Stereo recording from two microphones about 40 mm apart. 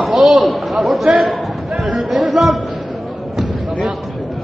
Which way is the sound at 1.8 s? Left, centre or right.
Centre.